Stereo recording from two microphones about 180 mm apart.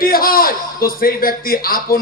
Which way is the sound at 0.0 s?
55° left (ahead or behind).